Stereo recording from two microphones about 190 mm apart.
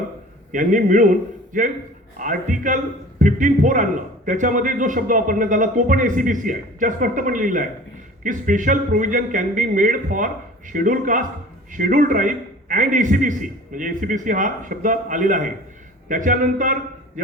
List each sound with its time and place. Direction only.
0.5 s a man's voice: 45° right (ahead or behind)